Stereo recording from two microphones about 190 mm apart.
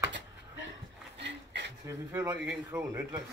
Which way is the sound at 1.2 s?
70° right (ahead or behind).